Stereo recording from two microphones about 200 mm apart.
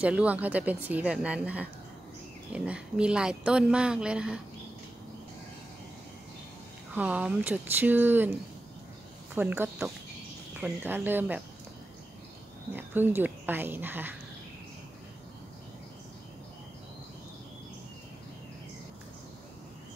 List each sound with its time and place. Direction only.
0.0 s speech: 5° right (ahead or behind)
7.0 s speech: 5° right (ahead or behind)
12.7 s speech: 10° right (ahead or behind)